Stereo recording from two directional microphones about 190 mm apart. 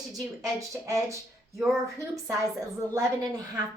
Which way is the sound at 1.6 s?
Centre (ahead or behind).